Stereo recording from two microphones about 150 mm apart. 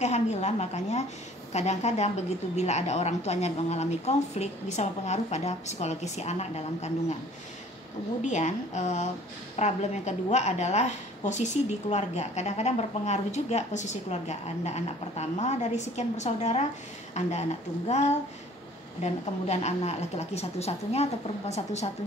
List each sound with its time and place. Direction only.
0.0 s a woman's voice: 50° left (ahead or behind)
8.2 s a woman's voice: 50° left (ahead or behind)